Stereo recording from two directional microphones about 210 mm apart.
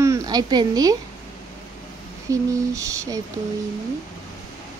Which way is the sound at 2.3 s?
15° right (ahead or behind).